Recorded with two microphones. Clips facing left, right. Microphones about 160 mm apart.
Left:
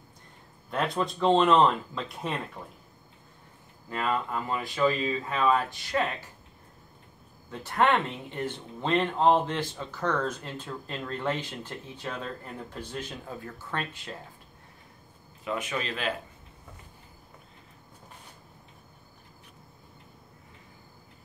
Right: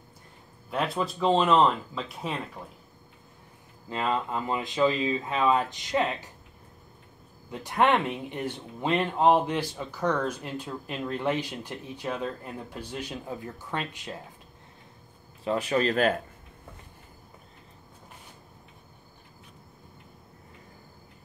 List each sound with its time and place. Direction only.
0.7 s speech: 5° right (ahead or behind)
3.9 s speech: 20° right (ahead or behind)
7.5 s speech: 15° right (ahead or behind)
15.4 s speech: 35° right (ahead or behind)